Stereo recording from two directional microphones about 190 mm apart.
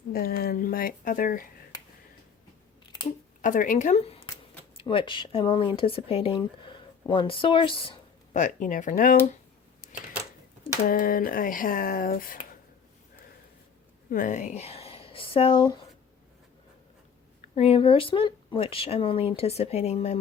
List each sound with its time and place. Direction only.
0.1 s speech: 55° left (ahead or behind)
3.4 s speech: 45° left (ahead or behind); by 8.4 s 30° left (ahead or behind)
8.4 s speech: 40° left (ahead or behind)
9.8 s a sound: 45° left (ahead or behind)
10.8 s speech: 50° left (ahead or behind)
14.1 s speech: 45° left (ahead or behind); by 15.7 s 30° left (ahead or behind)
17.4 s speech: 35° left (ahead or behind)